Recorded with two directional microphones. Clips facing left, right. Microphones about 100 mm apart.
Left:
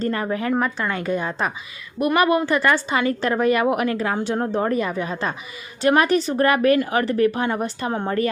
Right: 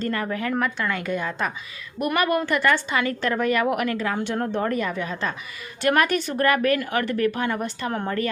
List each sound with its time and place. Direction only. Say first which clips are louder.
0.0 s a woman's voice: left 3 dB; 30° left (ahead or behind)
2.0 s a woman's voice: left 4 dB; 20° left (ahead or behind)
2.5 s a woman's voice: left 2 dB; 35° left (ahead or behind)
7.9 s a woman's voice: left 3 dB; 25° left (ahead or behind)